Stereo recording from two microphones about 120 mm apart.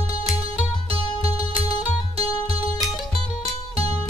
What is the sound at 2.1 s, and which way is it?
Music, 55° right (ahead or behind).